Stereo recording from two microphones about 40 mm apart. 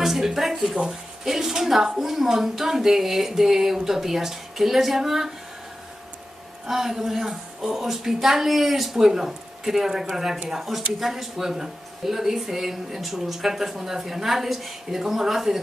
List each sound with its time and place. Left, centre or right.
0.0 s speech: centre
6.6 s speech: centre